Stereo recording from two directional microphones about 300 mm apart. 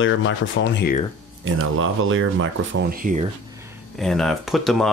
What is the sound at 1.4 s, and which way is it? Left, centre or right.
Speech, right.